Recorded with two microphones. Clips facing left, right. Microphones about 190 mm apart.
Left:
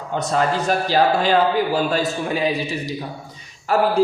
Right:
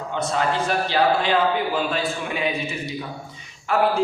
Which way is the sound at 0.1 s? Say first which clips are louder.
Left 3 dB; 40° left (ahead or behind).